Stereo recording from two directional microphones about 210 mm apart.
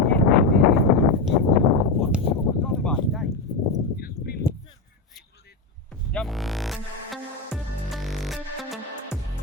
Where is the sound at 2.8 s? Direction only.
Centre (ahead or behind).